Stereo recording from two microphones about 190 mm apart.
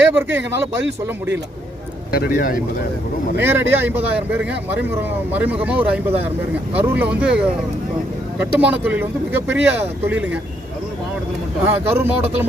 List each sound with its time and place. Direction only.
0.2 s speech: 10° right (ahead or behind)
2.1 s speech: 50° left (ahead or behind)
3.3 s speech: 10° right (ahead or behind)
11.6 s speech: 10° right (ahead or behind)